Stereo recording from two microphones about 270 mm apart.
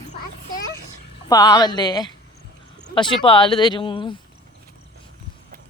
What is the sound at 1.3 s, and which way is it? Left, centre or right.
Speech, centre.